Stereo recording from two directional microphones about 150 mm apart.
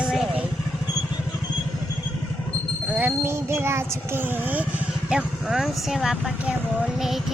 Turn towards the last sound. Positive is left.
turn(degrees=-5)  # may be behind; listen again after turning